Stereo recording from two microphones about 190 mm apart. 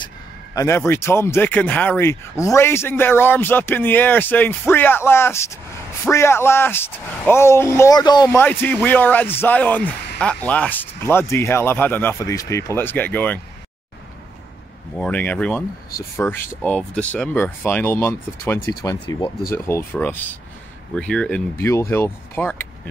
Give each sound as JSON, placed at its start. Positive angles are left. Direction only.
{"t": 0.6, "sound": "speech", "side_deg": 15}
{"t": 15.0, "sound": "speech", "side_deg": 10}